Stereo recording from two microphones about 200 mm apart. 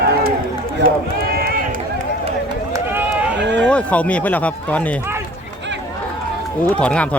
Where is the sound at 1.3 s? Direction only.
45° right (ahead or behind).